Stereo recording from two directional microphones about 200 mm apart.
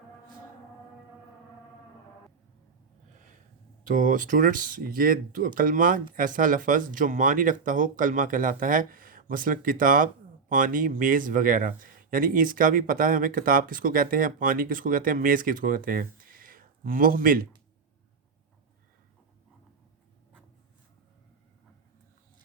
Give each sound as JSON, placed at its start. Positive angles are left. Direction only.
{"t": 3.8, "sound": "speech", "side_deg": -40}